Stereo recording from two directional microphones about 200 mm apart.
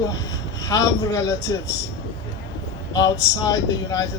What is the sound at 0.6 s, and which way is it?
Speech, 15° left (ahead or behind).